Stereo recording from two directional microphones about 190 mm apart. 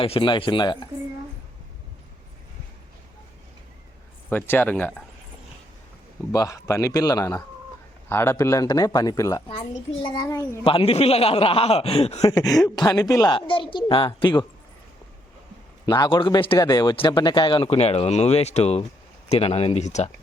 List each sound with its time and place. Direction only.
0.0 s speech: 30° left (ahead or behind)
4.3 s a man's voice: 10° left (ahead or behind)
6.3 s a man's voice: 15° left (ahead or behind)
10.6 s a man's voice: 30° left (ahead or behind)
12.2 s speech: 20° left (ahead or behind)
15.9 s a man's voice: 25° left (ahead or behind)